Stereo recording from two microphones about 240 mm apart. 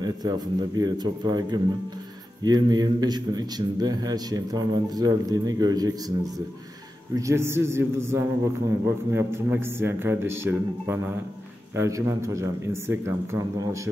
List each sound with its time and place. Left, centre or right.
0.0 s a man's voice: centre
7.2 s a man's voice: centre